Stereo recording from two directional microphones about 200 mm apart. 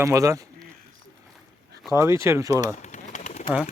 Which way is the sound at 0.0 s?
15° right (ahead or behind).